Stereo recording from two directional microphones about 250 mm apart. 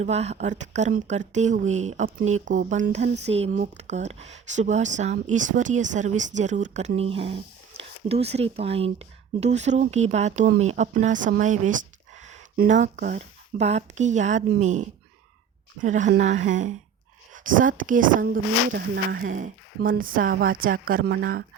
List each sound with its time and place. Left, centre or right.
0.0 s speech: right
19.2 s speech: right